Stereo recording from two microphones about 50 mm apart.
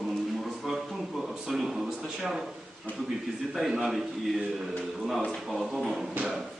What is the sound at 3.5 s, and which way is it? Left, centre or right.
A man's voice, centre.